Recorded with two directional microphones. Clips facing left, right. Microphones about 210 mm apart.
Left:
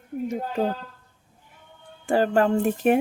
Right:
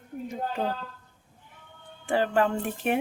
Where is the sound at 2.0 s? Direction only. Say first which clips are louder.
Left 4 dB; 40° left (ahead or behind).